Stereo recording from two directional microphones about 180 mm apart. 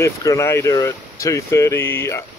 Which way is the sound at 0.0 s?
15° left (ahead or behind).